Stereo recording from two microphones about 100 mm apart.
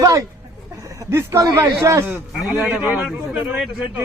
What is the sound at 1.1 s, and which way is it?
Speech, 25° right (ahead or behind).